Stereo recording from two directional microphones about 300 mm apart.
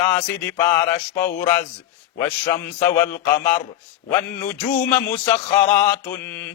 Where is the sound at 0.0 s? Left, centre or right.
Centre.